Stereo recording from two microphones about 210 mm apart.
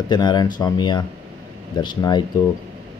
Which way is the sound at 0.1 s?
20° left (ahead or behind).